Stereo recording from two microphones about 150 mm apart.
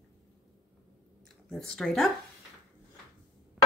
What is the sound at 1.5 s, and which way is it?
Speech, 5° left (ahead or behind).